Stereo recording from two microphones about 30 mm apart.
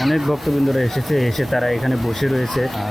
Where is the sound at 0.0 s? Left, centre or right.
Centre.